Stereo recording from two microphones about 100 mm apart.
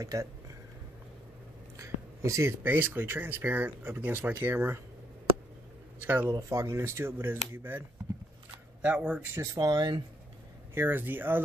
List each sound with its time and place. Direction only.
0.0 s speech: 35° right (ahead or behind)
1.8 s speech: 30° right (ahead or behind)
5.9 s speech: 20° right (ahead or behind)
6.3 s speech: 30° right (ahead or behind)
8.8 s speech: 15° right (ahead or behind)
9.4 s speech: 40° right (ahead or behind)
10.7 s speech: 20° right (ahead or behind)